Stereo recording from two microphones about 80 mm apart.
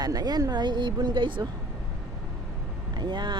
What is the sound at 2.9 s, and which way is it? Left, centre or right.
Speech, right.